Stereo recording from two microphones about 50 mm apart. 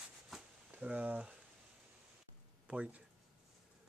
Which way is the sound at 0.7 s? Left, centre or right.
Right.